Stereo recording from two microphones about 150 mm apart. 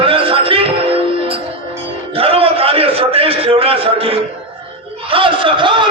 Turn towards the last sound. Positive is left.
turn(degrees=-35)  # may be behind; listen again after turning